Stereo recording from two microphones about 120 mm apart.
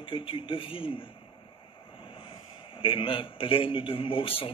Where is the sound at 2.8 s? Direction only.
45° left (ahead or behind).